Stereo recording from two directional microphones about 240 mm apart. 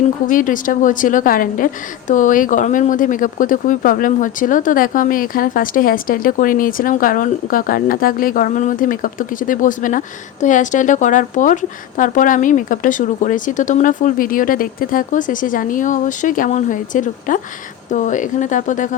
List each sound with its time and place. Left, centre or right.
0.3 s a woman's voice: left